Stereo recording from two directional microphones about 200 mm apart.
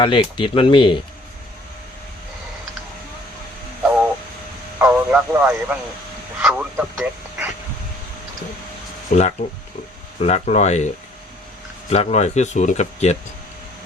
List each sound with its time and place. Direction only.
0.0 s speech: 25° left (ahead or behind)
3.8 s a sound: 5° right (ahead or behind)
4.8 s speech: 5° right (ahead or behind)
10.2 s speech: 35° left (ahead or behind)
11.9 s speech: 35° left (ahead or behind)